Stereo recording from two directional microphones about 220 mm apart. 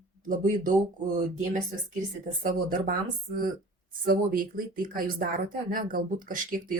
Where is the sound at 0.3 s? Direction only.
35° right (ahead or behind).